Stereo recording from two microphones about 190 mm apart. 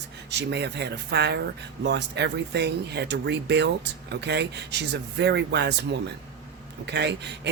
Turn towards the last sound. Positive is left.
turn(degrees=-65)  # may be behind; listen again after turning